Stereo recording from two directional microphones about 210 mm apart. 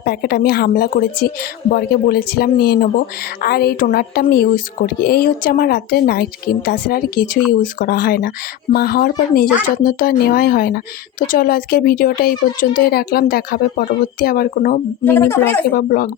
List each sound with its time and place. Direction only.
0.0 s speech: 50° left (ahead or behind)
15.0 s a woman's voice: 10° left (ahead or behind)
15.7 s speech: 40° left (ahead or behind)